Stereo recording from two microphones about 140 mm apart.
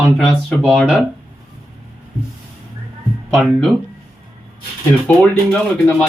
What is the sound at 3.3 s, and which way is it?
Speech, 5° left (ahead or behind).